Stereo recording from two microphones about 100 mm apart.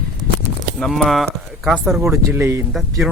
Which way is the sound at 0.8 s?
Centre (ahead or behind).